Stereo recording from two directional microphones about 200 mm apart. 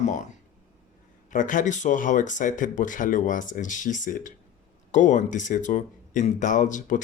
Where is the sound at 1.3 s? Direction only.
40° left (ahead or behind).